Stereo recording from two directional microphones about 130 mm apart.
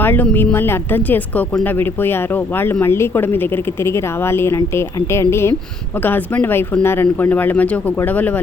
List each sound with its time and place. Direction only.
0.0 s a woman's voice: 15° left (ahead or behind)